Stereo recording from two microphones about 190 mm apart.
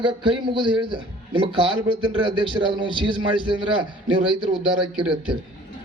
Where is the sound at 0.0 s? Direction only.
25° right (ahead or behind).